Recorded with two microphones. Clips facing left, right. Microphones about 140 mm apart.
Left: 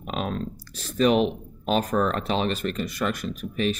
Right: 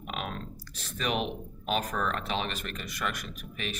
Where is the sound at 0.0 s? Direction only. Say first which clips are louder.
Left 8 dB; 35° left (ahead or behind).